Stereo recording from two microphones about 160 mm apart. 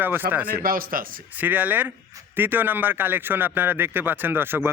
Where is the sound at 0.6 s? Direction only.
60° right (ahead or behind).